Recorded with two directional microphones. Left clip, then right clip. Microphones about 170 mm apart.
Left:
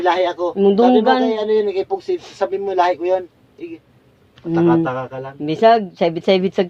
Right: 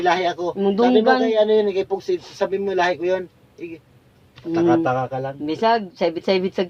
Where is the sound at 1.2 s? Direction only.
20° left (ahead or behind).